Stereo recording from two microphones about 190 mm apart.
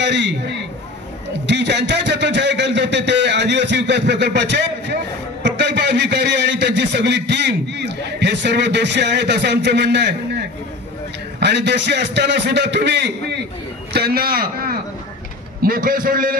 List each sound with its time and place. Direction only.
0.0 s a man's voice: 65° right (ahead or behind)
13.9 s a man's voice: 55° right (ahead or behind)